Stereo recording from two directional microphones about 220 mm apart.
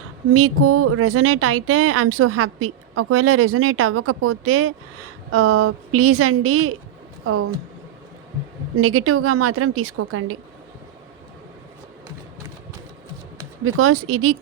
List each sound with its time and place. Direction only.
0.3 s a woman's voice: 80° right
8.8 s a woman's voice: 75° right (ahead or behind)
13.7 s a woman's voice: 80° right